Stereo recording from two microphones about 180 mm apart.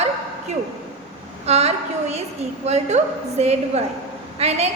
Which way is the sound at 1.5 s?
35° right (ahead or behind).